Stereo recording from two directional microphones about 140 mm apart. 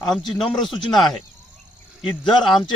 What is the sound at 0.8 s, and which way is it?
Speech, 30° left (ahead or behind).